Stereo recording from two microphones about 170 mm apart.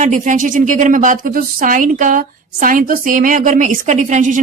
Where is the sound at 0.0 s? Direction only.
50° right (ahead or behind).